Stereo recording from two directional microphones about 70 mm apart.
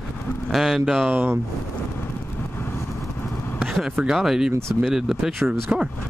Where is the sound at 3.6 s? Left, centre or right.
Centre.